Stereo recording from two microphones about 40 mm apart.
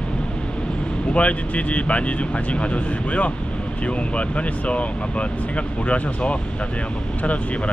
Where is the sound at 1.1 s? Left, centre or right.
Left.